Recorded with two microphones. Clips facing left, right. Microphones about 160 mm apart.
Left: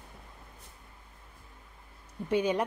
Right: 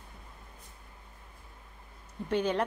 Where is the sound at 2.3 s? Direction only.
10° left (ahead or behind).